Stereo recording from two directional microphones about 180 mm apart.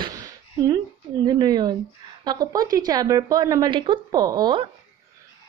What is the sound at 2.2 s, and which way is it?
A woman's voice, 20° right (ahead or behind).